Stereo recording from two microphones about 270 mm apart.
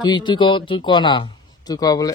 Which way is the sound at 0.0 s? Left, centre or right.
Centre.